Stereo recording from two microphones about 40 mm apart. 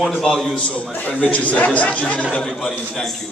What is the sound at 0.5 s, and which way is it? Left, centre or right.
A man's voice, left.